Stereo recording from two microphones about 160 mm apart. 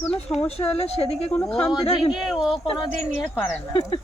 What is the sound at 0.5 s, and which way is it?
Speech, 40° left (ahead or behind).